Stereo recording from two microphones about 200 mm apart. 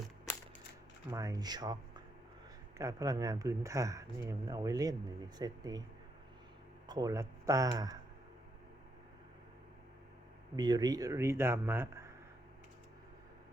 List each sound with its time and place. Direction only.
1.1 s speech: 15° right (ahead or behind)
6.8 s speech: 20° right (ahead or behind)
10.6 s speech: 20° right (ahead or behind)